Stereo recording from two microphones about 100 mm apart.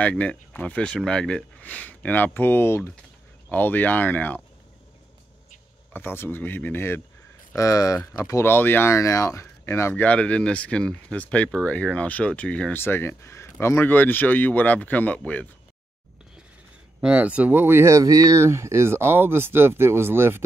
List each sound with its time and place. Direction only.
0.0 s speech: 10° left (ahead or behind)
5.9 s speech: 20° left (ahead or behind)
7.5 s speech: 35° left (ahead or behind)
10.0 s speech: 10° left (ahead or behind)
12.8 s speech: 25° left (ahead or behind)
17.0 s speech: 15° right (ahead or behind)